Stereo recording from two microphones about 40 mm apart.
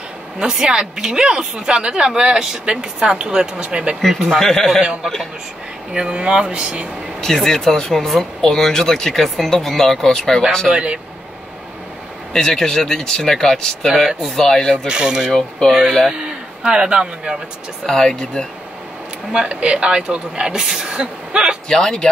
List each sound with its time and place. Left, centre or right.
0.4 s speech: centre
4.1 s speech: centre
4.4 s speech: centre
6.1 s speech: right
7.2 s speech: centre
10.7 s speech: right
12.3 s speech: centre
13.8 s speech: centre
14.3 s speech: centre
14.9 s a man's voice: right
17.8 s speech: centre
19.3 s speech: right
21.6 s speech: centre